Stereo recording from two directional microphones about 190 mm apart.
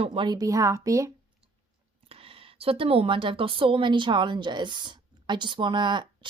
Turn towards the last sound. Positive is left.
turn(degrees=-25)  # may be behind; listen again after turning